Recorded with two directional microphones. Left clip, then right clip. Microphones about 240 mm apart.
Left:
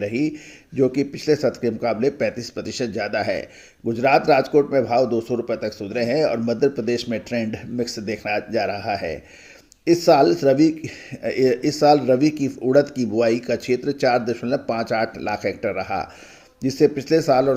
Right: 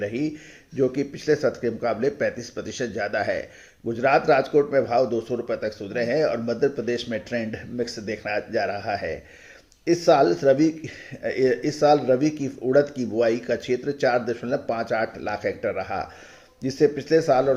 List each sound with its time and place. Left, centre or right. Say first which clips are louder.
0.0 s speech: left 4 dB; left